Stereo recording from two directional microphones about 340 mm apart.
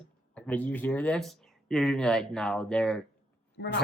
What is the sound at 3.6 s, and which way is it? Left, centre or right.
Speech, left.